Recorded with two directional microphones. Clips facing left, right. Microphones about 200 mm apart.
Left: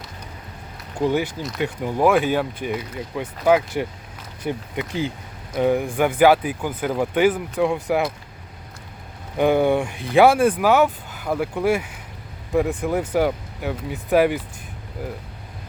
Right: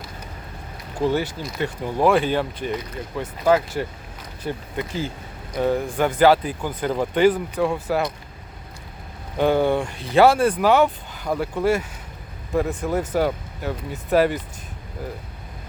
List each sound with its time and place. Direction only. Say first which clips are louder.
1.0 s speech: left 1 dB; 15° left (ahead or behind)
9.4 s speech: left 1 dB; 15° left (ahead or behind)